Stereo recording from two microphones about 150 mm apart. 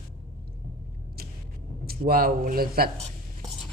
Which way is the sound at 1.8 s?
80° right.